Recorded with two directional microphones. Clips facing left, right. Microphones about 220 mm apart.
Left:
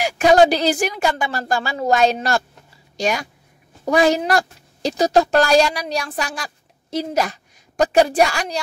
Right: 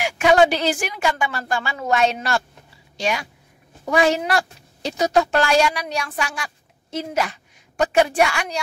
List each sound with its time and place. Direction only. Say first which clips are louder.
0.0 s a woman's voice: left 2 dB; 35° left (ahead or behind)